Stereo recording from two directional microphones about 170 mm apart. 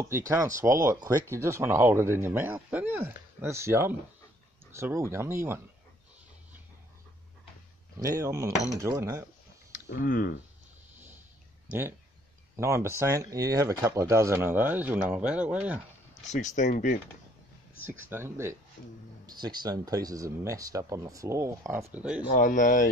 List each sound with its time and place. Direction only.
0.1 s speech: 20° right (ahead or behind)
8.0 s speech: 15° right (ahead or behind)
9.8 s speech: 55° left (ahead or behind)
12.5 s speech: 15° right (ahead or behind)
16.3 s speech: 45° left (ahead or behind)
18.1 s speech: 15° right (ahead or behind)
22.3 s speech: 50° left (ahead or behind)